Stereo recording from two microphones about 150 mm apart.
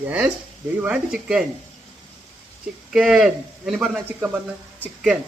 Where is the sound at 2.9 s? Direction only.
5° right (ahead or behind).